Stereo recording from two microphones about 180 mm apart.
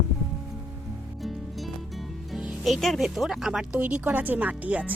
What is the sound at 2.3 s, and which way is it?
Speech, centre (ahead or behind).